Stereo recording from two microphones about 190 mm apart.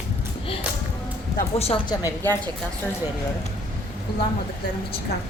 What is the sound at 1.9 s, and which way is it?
Speech, 15° left (ahead or behind).